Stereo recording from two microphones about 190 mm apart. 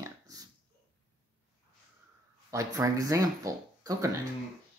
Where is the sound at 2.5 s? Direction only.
20° right (ahead or behind).